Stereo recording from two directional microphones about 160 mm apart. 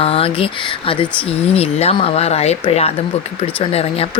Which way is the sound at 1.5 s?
40° left (ahead or behind).